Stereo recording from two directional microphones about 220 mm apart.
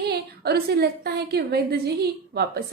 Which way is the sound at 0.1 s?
45° right (ahead or behind).